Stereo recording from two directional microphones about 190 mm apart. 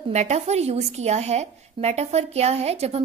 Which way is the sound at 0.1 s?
35° right (ahead or behind).